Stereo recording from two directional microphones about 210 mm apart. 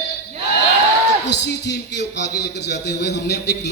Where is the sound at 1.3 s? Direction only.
55° left (ahead or behind).